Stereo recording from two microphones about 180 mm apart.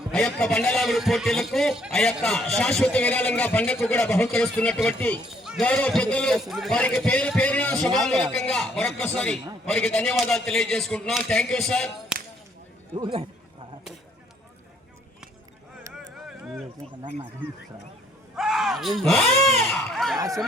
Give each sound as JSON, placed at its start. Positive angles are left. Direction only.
{"t": 0.1, "sound": "a man's voice", "side_deg": 5}
{"t": 13.0, "sound": "speech", "side_deg": -30}
{"t": 15.9, "sound": "a sound", "side_deg": -5}
{"t": 18.3, "sound": "speech", "side_deg": 0}